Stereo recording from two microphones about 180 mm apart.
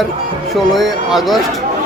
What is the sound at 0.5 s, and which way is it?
Speech, centre (ahead or behind).